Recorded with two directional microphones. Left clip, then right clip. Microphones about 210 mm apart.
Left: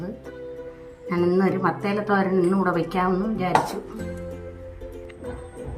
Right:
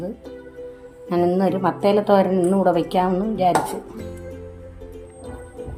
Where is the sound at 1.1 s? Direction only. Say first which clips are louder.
Right 2 dB; 15° right (ahead or behind).